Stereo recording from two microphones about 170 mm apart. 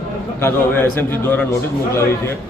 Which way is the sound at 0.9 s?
10° left (ahead or behind).